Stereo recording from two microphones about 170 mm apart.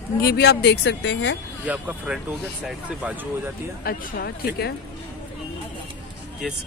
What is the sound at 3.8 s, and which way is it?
Speech, 60° left (ahead or behind).